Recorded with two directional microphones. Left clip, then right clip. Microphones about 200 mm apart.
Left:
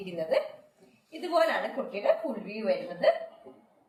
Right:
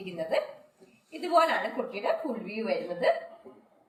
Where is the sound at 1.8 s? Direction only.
10° left (ahead or behind).